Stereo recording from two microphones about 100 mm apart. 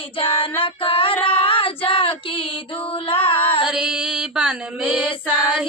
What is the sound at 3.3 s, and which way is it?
Female singing, 20° left (ahead or behind).